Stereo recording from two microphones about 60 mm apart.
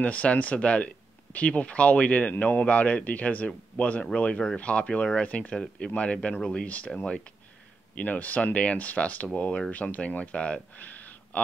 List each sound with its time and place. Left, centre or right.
0.0 s speech: left
8.0 s speech: left